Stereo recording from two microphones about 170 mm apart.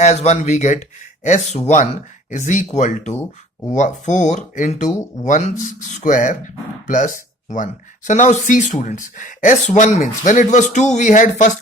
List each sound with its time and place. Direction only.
0.0 s speech: 40° left (ahead or behind)
4.9 s speech: 15° left (ahead or behind)
5.2 s speech: 45° left (ahead or behind)